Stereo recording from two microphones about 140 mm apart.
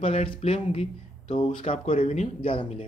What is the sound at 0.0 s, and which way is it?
Speech, 45° left (ahead or behind).